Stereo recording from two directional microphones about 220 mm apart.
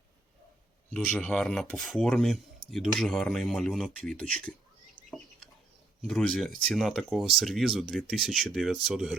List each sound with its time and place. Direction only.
0.9 s speech: 5° left (ahead or behind)
6.0 s speech: 5° left (ahead or behind)